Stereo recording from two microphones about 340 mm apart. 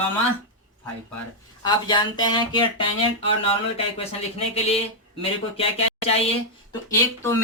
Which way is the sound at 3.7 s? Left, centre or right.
Centre.